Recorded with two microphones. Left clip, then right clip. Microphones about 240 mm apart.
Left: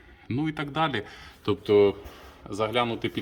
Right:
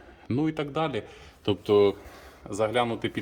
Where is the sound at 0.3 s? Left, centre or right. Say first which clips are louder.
Right 2 dB; centre.